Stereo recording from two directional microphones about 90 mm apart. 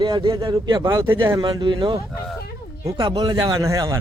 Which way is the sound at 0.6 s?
45° right (ahead or behind).